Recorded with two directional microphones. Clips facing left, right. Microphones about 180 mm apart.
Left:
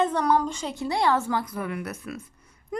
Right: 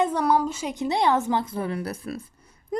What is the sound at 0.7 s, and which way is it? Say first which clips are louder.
A woman's voice: right 2 dB; 20° right (ahead or behind).